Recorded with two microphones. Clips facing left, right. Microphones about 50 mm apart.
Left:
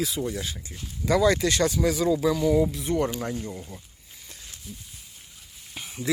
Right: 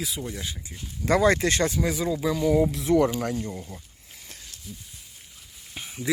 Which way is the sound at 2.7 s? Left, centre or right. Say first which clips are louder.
Right 5 dB; right.